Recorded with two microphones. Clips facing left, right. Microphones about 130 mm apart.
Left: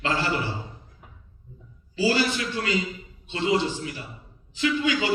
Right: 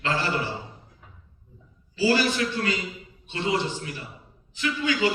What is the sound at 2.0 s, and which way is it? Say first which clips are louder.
A man's voice: right 1 dB; 20° left (ahead or behind).